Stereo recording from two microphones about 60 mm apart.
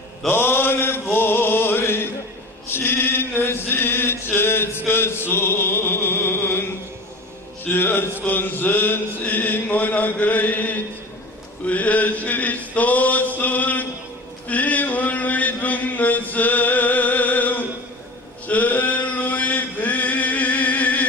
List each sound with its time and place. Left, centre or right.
0.3 s mantra: left
1.1 s music: left
2.7 s chant: left
7.6 s chant: left